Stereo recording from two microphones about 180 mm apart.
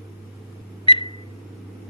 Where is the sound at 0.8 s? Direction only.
30° left (ahead or behind).